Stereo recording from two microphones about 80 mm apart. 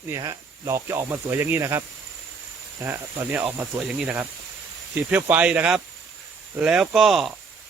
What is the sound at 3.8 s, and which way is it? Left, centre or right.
Speech, centre.